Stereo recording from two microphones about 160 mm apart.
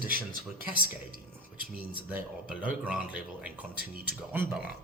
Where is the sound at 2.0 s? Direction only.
10° right (ahead or behind).